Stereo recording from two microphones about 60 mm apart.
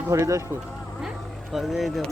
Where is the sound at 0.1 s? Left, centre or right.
Right.